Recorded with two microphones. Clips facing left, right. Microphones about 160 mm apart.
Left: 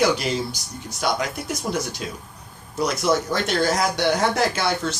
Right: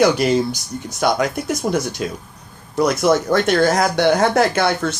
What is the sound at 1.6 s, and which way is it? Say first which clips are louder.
Speech: right 5 dB; 45° right (ahead or behind).